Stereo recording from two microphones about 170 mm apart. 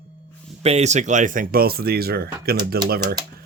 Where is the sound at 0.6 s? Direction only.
40° right (ahead or behind).